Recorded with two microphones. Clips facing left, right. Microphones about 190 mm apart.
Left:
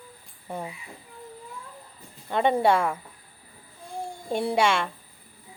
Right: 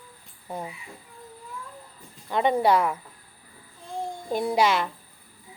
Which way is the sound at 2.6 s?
25° left (ahead or behind).